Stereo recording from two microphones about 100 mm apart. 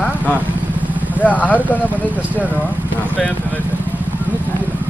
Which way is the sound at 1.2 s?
15° left (ahead or behind).